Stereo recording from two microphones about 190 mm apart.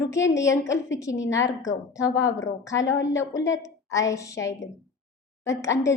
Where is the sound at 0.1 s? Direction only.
15° left (ahead or behind).